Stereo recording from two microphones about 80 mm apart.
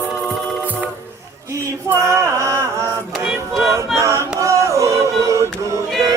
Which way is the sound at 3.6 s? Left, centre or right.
Right.